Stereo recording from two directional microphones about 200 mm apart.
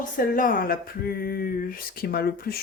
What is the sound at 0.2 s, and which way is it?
A woman's voice, 45° left (ahead or behind).